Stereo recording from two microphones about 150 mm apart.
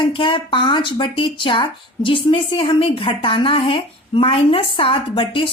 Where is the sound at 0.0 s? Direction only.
35° left (ahead or behind).